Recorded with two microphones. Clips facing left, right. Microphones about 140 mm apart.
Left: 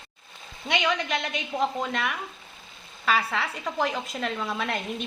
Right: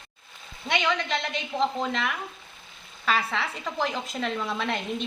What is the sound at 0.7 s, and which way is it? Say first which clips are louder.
Speech: even; 15° left (ahead or behind).